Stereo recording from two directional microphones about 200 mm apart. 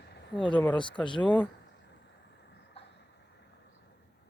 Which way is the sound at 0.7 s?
25° left (ahead or behind).